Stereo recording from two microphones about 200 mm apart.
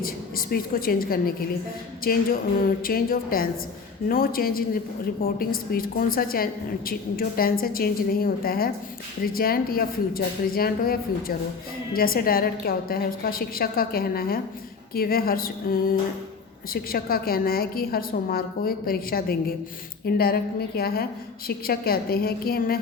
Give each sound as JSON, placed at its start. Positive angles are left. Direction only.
{"t": 0.0, "sound": "a woman's voice", "side_deg": 45}